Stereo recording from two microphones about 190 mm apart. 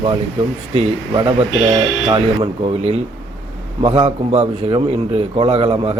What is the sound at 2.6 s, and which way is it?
Speech, 30° right (ahead or behind).